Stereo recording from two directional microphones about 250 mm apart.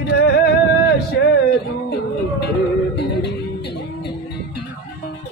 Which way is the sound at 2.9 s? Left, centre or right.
Left.